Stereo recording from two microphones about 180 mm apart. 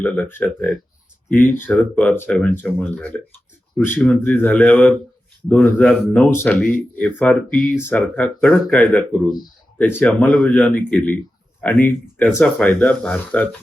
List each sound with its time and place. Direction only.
0.0 s speech: 10° left (ahead or behind)